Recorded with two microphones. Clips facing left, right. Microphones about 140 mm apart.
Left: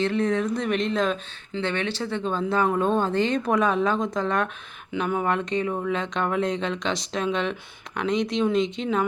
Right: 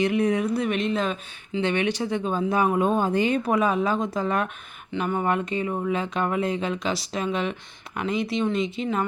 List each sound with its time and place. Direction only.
0.0 s speech: 10° right (ahead or behind)
1.6 s speech: 15° right (ahead or behind)